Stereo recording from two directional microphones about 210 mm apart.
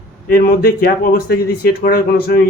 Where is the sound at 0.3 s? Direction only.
45° left (ahead or behind).